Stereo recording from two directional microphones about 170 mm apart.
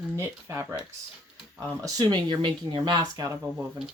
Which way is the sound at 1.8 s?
20° right (ahead or behind).